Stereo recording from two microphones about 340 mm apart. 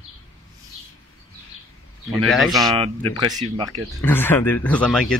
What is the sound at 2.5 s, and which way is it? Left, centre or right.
Speech, centre.